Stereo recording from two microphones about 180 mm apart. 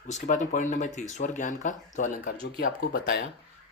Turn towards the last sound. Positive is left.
turn(degrees=55)  # may be behind; listen again after turning